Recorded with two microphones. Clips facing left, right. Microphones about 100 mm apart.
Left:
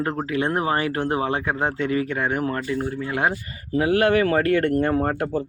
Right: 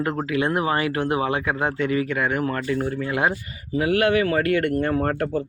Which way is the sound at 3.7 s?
35° left (ahead or behind).